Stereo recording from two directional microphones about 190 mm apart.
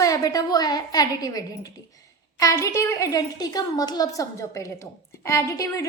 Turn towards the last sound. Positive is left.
turn(degrees=15)  # may be behind; listen again after turning